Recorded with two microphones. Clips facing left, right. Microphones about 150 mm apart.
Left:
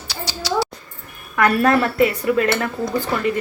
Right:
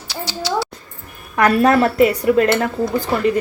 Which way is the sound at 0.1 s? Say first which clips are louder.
Right 2 dB; 20° right (ahead or behind).